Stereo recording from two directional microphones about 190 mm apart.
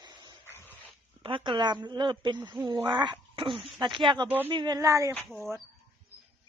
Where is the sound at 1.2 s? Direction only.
25° right (ahead or behind).